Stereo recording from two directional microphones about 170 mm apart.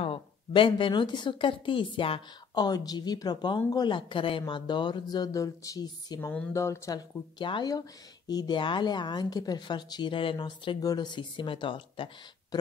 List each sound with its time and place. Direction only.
0.0 s a woman's voice: 30° left (ahead or behind)